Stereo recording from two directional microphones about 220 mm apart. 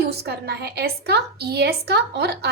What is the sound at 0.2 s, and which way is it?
A woman's voice, 45° right (ahead or behind).